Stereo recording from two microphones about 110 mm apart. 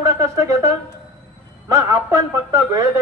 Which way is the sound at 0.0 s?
30° right (ahead or behind).